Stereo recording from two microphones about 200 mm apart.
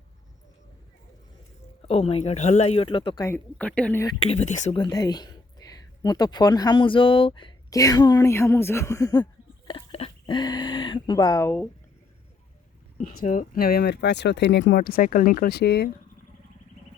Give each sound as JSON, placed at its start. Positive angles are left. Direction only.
{"t": 1.8, "sound": "speech", "side_deg": 30}
{"t": 3.2, "sound": "a woman's voice", "side_deg": 10}
{"t": 4.2, "sound": "speech", "side_deg": 35}
{"t": 4.8, "sound": "speech", "side_deg": 20}
{"t": 9.6, "sound": "a sound", "side_deg": 30}
{"t": 13.0, "sound": "speech", "side_deg": 40}